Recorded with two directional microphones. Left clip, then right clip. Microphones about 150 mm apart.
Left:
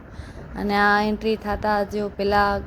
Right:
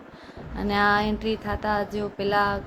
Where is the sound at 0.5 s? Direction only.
35° left (ahead or behind).